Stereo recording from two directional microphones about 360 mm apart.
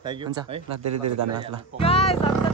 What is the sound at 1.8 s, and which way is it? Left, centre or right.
Speech, centre.